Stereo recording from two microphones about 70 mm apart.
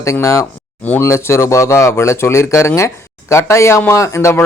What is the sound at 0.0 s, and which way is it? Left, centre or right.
Speech, left.